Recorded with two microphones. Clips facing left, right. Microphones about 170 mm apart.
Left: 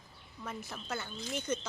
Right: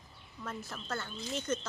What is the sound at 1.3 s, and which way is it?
Speech, 15° left (ahead or behind).